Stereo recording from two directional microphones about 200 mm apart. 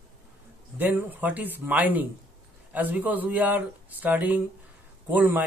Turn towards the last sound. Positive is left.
turn(degrees=-10)  # may be behind; listen again after turning